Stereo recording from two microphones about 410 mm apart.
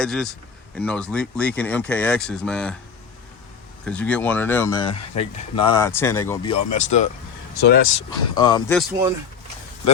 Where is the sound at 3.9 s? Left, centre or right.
Centre.